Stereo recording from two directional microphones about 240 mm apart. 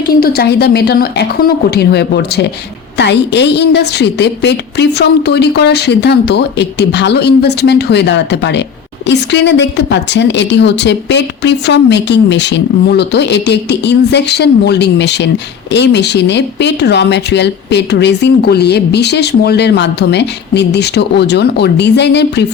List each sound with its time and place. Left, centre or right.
0.1 s a woman's voice: left